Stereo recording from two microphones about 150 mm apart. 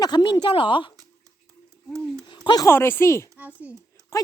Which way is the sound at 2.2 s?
30° left (ahead or behind).